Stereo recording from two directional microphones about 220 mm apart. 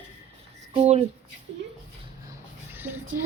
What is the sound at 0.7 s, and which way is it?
Speech, 25° right (ahead or behind).